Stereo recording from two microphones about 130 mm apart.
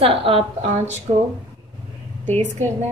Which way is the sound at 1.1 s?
70° right (ahead or behind).